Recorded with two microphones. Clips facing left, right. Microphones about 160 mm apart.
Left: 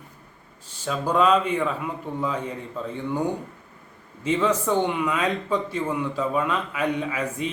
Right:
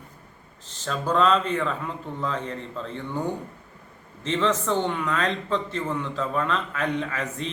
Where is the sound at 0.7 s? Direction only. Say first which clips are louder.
Left 1 dB; 10° left (ahead or behind).